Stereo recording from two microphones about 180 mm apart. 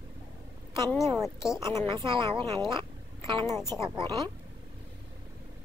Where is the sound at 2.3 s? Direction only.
25° right (ahead or behind).